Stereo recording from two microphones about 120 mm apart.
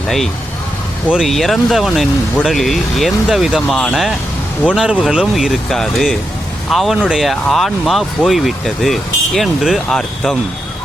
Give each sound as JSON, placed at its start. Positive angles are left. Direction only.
{"t": 1.0, "sound": "speech", "side_deg": -10}